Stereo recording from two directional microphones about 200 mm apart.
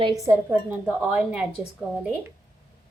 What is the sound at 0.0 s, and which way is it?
Speech, 15° right (ahead or behind).